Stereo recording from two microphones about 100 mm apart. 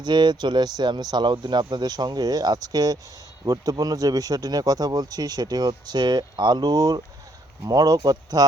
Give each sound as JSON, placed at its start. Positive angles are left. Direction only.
{"t": 0.0, "sound": "speech", "side_deg": -45}